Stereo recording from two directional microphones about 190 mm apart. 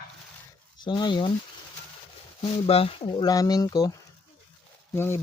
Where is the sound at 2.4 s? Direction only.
30° left (ahead or behind).